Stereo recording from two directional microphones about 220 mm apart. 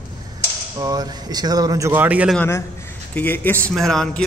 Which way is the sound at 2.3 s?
10° left (ahead or behind).